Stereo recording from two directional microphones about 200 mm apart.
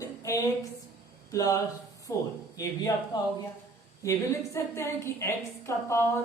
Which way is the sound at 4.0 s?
15° left (ahead or behind).